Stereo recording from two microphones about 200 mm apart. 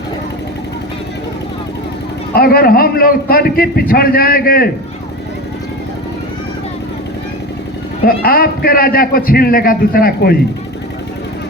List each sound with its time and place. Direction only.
2.3 s a man's voice: 50° left (ahead or behind)
8.0 s a man's voice: 45° left (ahead or behind)